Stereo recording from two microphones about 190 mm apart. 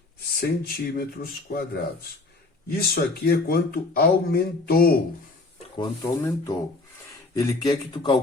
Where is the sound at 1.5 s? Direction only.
55° left (ahead or behind).